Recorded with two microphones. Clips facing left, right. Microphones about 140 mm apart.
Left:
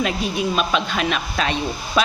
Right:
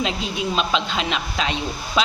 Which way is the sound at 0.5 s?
20° right (ahead or behind).